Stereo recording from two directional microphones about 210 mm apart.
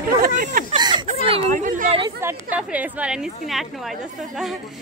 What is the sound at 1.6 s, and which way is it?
Chatter, 35° right (ahead or behind).